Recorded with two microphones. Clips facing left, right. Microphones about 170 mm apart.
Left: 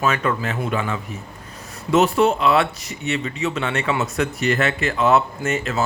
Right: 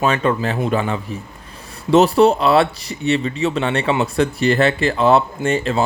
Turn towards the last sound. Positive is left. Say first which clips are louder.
# right 4 dB
turn(degrees=-30)  # may be behind; listen again after turning